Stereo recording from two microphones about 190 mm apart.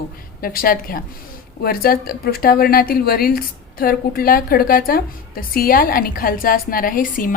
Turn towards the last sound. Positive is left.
turn(degrees=45)  # may be behind; listen again after turning